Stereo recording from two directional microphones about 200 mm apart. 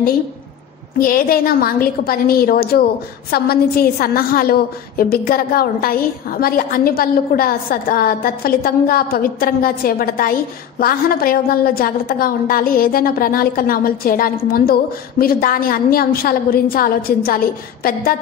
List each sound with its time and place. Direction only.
0.9 s a woman's voice: 45° left (ahead or behind)